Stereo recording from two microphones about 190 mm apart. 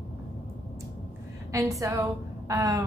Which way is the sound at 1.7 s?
15° right (ahead or behind).